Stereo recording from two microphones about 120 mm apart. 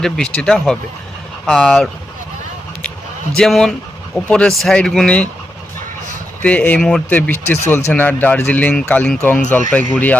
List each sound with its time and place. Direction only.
0.0 s speech: 5° left (ahead or behind)
3.3 s speech: 5° left (ahead or behind)
6.4 s speech: 10° left (ahead or behind)